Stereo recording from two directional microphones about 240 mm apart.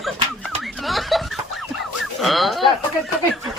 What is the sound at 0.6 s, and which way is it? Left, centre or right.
Snicker, centre.